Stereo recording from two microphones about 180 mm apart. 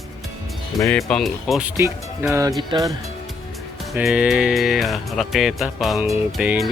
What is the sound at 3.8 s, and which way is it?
Speech, centre (ahead or behind).